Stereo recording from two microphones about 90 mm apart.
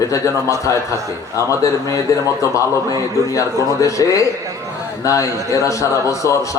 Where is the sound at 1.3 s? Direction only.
35° left (ahead or behind).